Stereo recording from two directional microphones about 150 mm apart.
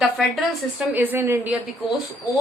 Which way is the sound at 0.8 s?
10° right (ahead or behind).